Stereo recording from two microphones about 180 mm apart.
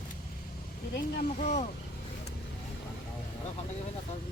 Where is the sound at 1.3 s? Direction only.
40° left (ahead or behind).